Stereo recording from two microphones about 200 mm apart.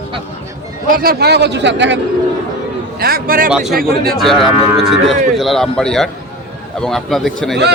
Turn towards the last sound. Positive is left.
turn(degrees=0)  # may be behind; listen again after turning